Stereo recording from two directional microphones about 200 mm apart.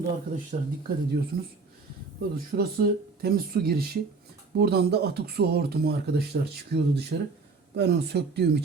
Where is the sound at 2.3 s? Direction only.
45° right (ahead or behind).